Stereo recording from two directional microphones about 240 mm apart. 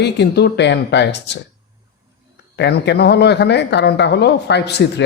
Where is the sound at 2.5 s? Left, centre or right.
Left.